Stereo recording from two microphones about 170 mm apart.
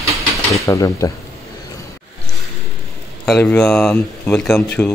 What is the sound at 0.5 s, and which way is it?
Speech, 20° left (ahead or behind).